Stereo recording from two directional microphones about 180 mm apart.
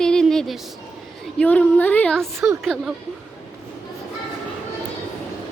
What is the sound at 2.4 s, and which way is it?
Speech, 15° right (ahead or behind).